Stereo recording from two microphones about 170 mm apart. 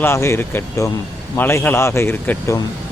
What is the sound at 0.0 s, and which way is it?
Speech, 15° left (ahead or behind).